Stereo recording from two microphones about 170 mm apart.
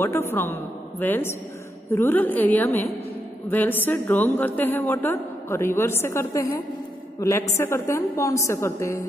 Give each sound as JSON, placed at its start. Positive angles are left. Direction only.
{"t": 0.0, "sound": "a woman's voice", "side_deg": 15}